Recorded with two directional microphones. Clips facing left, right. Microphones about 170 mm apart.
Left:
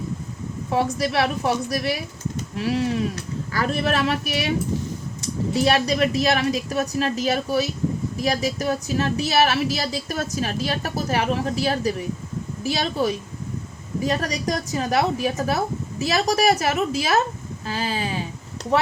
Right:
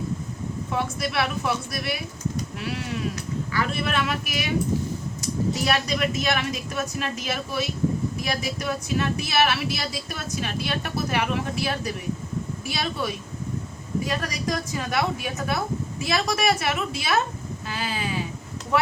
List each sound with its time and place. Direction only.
0.7 s a woman's voice: 35° left (ahead or behind)
5.6 s a woman's voice: 35° left (ahead or behind)